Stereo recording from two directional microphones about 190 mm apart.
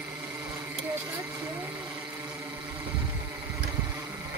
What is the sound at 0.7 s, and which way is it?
Vehicle, 15° right (ahead or behind).